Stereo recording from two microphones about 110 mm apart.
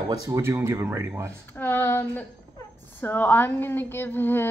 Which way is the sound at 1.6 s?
20° left (ahead or behind).